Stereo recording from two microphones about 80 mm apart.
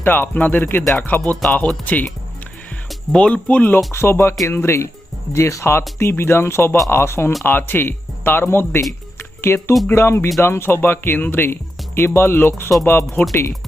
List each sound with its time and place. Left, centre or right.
0.0 s speech: left
2.9 s speech: centre
3.9 s speech: left